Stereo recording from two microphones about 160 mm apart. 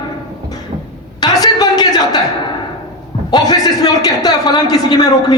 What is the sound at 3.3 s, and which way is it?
A man's voice, 25° left (ahead or behind).